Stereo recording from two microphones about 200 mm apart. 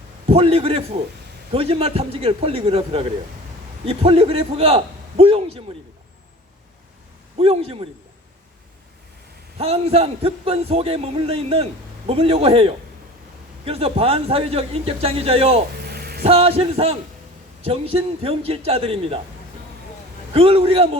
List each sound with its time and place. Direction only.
0.3 s a man's voice: 30° right (ahead or behind)
7.3 s a man's voice: 30° right (ahead or behind)
9.6 s a man's voice: 30° right (ahead or behind)
15.8 s a sound: 50° right (ahead or behind)
16.2 s a man's voice: 30° right (ahead or behind)
20.3 s a man's voice: 30° right (ahead or behind)